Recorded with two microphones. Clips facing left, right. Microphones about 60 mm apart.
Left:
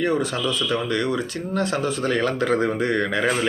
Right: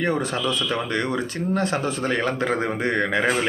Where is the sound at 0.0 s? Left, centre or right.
Right.